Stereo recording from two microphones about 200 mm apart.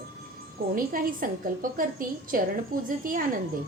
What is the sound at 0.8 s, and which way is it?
A woman's voice, 45° right (ahead or behind).